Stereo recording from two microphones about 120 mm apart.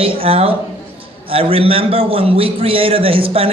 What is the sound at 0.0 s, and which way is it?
A man's voice, 50° right (ahead or behind).